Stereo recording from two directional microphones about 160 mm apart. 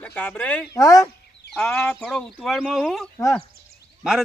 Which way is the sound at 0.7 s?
20° left (ahead or behind).